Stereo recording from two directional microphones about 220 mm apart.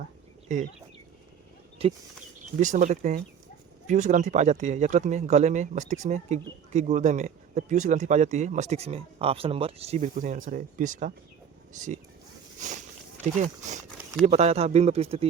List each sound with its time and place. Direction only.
0.4 s speech: 35° right (ahead or behind)
1.8 s a man's voice: 25° right (ahead or behind)